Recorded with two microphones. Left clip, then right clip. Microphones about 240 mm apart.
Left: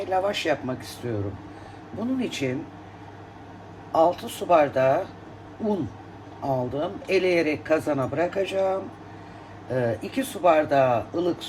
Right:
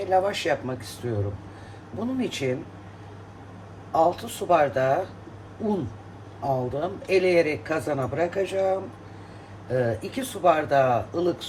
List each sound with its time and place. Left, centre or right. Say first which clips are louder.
0.0 s speech: right 1 dB; left
2.1 s speech: right 1 dB; left
3.9 s speech: left 1 dB; left